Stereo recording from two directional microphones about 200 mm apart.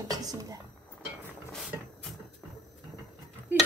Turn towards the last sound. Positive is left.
turn(degrees=-10)  # may be behind; listen again after turning